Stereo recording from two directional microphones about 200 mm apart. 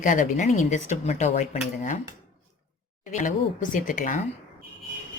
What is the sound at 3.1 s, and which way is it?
A woman's voice, 40° left (ahead or behind).